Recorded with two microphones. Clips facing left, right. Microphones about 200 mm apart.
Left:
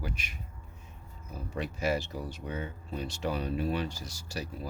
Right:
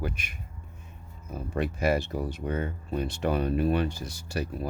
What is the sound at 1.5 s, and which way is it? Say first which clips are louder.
Speech: right 5 dB; 55° right (ahead or behind).